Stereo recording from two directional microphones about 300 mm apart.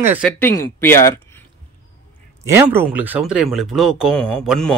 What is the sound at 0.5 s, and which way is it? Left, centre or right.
Speech, centre.